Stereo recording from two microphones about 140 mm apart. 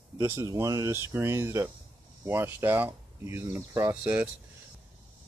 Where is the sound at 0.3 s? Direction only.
20° right (ahead or behind).